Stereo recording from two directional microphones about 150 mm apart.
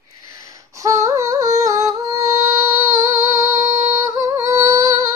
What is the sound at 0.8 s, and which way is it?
Yodeling, 20° right (ahead or behind).